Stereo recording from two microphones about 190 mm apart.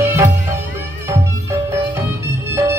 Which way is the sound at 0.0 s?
15° right (ahead or behind).